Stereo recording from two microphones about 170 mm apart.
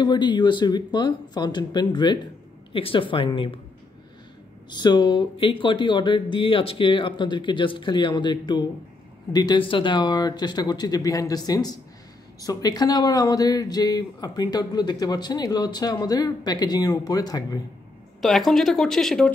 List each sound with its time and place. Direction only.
0.0 s speech: 25° left (ahead or behind)
4.6 s speech: 25° left (ahead or behind)
18.2 s speech: centre (ahead or behind)